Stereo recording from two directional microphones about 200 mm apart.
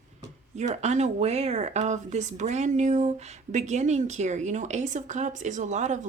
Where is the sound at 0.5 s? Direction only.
35° right (ahead or behind).